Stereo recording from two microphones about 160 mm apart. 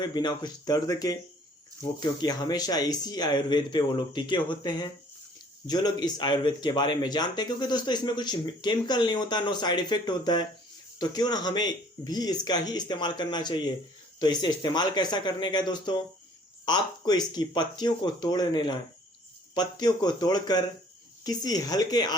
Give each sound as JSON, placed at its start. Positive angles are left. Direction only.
{"t": 0.0, "sound": "speech", "side_deg": 25}
{"t": 19.8, "sound": "speech", "side_deg": 25}